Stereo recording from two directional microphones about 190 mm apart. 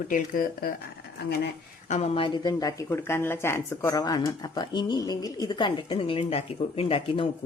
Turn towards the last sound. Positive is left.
turn(degrees=30)  # may be behind; listen again after turning